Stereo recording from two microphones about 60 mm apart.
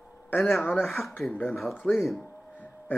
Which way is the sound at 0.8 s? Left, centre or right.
Centre.